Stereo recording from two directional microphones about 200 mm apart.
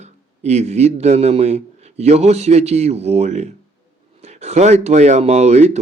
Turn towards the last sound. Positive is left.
turn(degrees=-35)  # may be behind; listen again after turning